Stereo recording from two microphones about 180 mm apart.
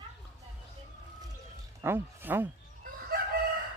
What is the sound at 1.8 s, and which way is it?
Speech, 10° right (ahead or behind).